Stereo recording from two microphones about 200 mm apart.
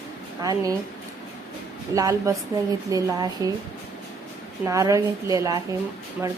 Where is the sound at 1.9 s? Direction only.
15° right (ahead or behind).